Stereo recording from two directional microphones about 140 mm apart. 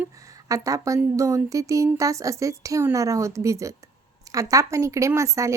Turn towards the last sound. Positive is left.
turn(degrees=-20)  # may be behind; listen again after turning